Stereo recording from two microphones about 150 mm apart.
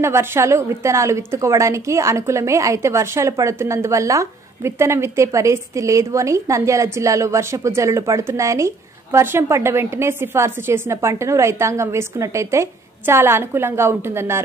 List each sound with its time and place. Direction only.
0.0 s a woman's voice: 15° right (ahead or behind)